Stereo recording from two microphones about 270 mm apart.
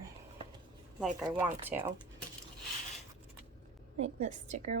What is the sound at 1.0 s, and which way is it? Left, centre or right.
Speech, centre.